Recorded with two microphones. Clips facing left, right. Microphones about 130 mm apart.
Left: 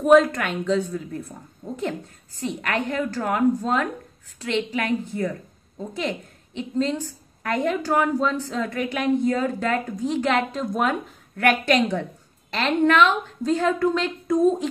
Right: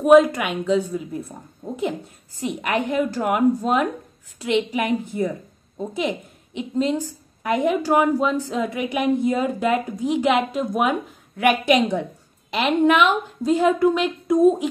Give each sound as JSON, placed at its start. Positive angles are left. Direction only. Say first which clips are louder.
{"t": 0.0, "sound": "a woman's voice", "louder": "right 2 dB", "side_deg": -10}